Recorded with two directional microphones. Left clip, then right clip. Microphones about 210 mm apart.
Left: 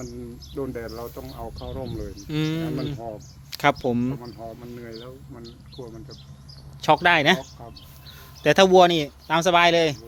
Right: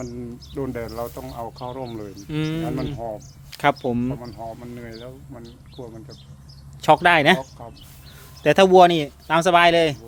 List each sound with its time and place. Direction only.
0.5 s speech: 50° right (ahead or behind)
2.2 s speech: centre (ahead or behind)
4.8 s speech: 55° right (ahead or behind)
6.8 s speech: 15° right (ahead or behind)
8.4 s speech: 10° right (ahead or behind)